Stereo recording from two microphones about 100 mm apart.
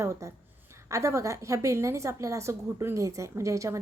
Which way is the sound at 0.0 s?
30° right (ahead or behind).